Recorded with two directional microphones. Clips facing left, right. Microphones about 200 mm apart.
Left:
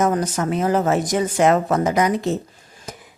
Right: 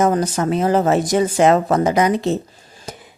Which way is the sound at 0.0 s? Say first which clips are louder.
Right 3 dB; 30° right (ahead or behind).